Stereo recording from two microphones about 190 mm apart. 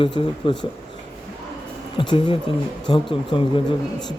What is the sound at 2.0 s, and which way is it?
Speech, 25° left (ahead or behind).